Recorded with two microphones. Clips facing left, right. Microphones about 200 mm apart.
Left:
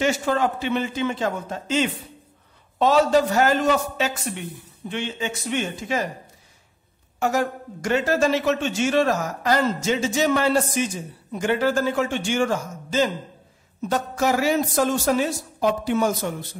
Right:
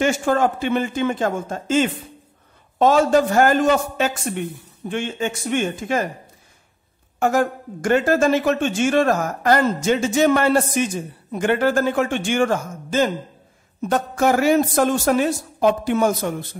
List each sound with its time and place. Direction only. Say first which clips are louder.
0.0 s speech: right 3 dB; 50° right (ahead or behind)
7.2 s a woman's voice: right 4 dB; 50° right (ahead or behind)